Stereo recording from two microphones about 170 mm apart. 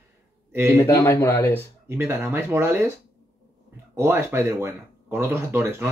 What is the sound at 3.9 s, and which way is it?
Speech, 15° right (ahead or behind).